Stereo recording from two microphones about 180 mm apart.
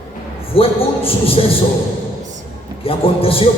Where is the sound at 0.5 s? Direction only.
30° left (ahead or behind).